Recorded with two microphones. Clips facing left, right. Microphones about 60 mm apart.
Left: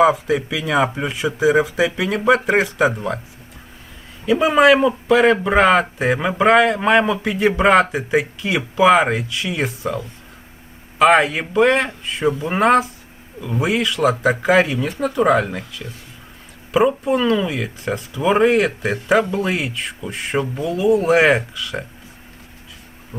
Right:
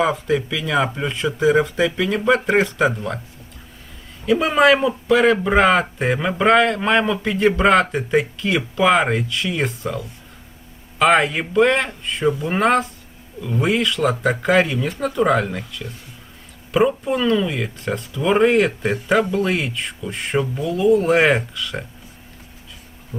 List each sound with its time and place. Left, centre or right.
0.0 s speech: centre
4.3 s speech: centre
11.0 s speech: centre